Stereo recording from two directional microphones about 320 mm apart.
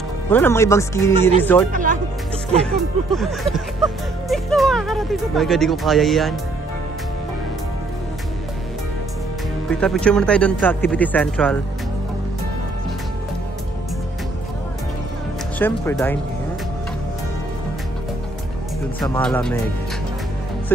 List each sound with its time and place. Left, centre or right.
0.3 s speech: centre
1.7 s speech: right
2.6 s speech: centre
9.7 s speech: centre
15.6 s speech: centre
18.9 s speech: centre